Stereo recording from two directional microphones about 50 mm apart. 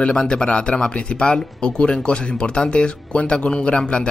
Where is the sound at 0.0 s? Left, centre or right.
Centre.